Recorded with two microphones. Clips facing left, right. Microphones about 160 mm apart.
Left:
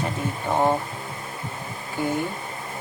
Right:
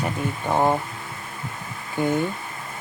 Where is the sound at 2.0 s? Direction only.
20° right (ahead or behind).